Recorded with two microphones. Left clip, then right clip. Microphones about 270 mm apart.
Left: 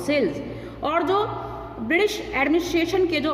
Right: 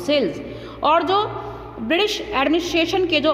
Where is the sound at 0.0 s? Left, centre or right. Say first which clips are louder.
Right 3 dB; centre.